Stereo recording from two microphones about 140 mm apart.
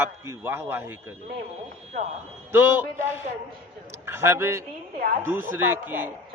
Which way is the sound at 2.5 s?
15° right (ahead or behind).